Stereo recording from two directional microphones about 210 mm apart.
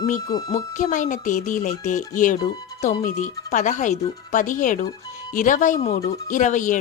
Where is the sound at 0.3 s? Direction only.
20° left (ahead or behind).